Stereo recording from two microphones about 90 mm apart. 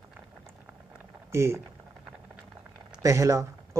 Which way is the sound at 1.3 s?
30° right (ahead or behind).